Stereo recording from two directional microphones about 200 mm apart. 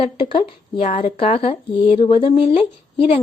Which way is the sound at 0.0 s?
25° left (ahead or behind).